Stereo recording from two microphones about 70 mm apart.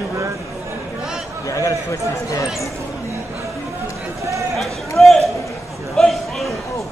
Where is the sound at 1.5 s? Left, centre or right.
Left.